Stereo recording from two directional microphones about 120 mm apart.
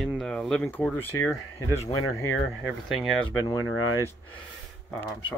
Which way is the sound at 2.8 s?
Centre (ahead or behind).